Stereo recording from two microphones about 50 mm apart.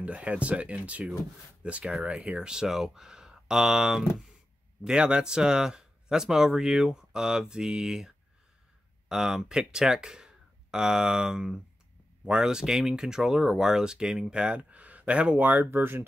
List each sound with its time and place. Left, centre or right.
0.0 s speech: right
9.1 s speech: centre; by 15.8 s right
15.8 s speech: right